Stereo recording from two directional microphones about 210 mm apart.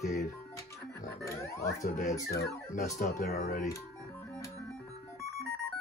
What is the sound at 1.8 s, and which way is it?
Speech, 35° left (ahead or behind).